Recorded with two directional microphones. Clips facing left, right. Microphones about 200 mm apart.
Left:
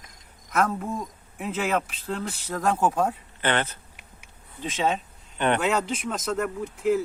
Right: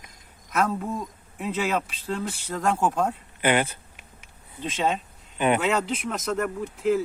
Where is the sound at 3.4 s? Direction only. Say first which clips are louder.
Right 3 dB; 10° right (ahead or behind).